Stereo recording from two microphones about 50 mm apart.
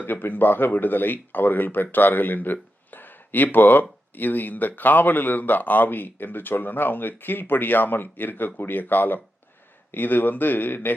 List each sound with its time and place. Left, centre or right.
0.1 s speech: left